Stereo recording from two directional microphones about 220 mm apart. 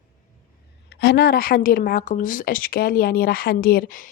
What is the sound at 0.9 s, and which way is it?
A woman's voice, 50° left (ahead or behind).